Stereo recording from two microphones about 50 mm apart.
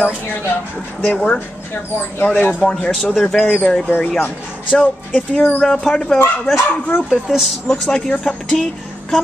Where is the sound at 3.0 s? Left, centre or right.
Centre.